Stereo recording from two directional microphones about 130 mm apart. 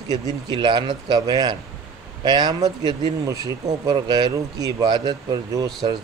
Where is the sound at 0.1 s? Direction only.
35° right (ahead or behind).